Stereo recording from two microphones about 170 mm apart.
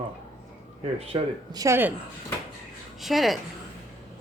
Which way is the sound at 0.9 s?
35° right (ahead or behind).